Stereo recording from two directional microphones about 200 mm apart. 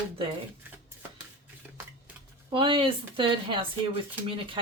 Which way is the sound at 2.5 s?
25° right (ahead or behind).